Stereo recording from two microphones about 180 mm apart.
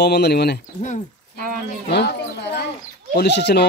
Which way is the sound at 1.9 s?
70° left (ahead or behind).